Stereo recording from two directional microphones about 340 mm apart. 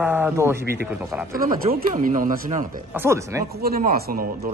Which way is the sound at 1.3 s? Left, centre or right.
Right.